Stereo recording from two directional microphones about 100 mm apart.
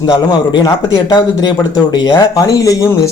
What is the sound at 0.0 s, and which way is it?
Speech, 45° left (ahead or behind).